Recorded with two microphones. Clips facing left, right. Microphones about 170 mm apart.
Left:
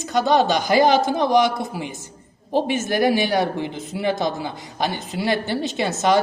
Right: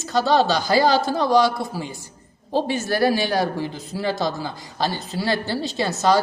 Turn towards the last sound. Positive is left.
turn(degrees=20)  # may be behind; listen again after turning